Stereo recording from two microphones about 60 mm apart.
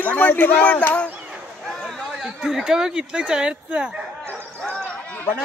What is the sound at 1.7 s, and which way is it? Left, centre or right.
Chatter, centre.